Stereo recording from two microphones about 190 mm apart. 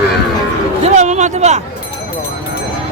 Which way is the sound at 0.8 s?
40° right (ahead or behind).